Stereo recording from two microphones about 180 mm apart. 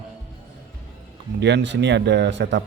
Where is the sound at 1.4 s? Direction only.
85° right.